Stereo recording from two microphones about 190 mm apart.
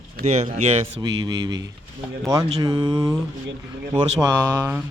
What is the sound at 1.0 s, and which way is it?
Speech, 20° right (ahead or behind).